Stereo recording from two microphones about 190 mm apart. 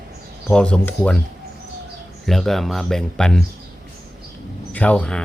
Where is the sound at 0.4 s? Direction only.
5° left (ahead or behind).